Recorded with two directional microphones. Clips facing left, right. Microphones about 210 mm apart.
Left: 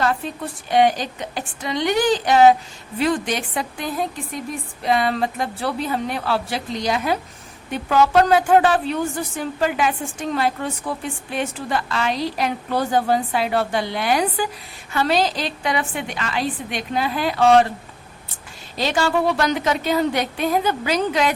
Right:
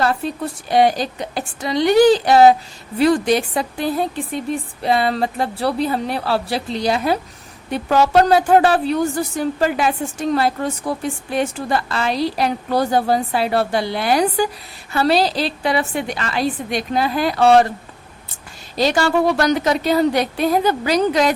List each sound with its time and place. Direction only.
0.7 s a woman's voice: 35° right (ahead or behind)
18.8 s a woman's voice: 40° right (ahead or behind)